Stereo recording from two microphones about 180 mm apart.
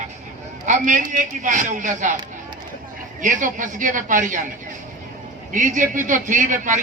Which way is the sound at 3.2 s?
45° right (ahead or behind).